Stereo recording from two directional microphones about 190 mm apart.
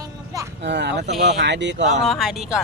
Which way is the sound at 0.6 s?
65° right (ahead or behind).